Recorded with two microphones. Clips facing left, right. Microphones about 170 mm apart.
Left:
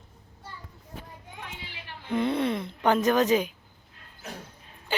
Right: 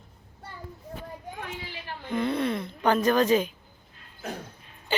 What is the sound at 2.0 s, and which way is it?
Speech, 25° left (ahead or behind).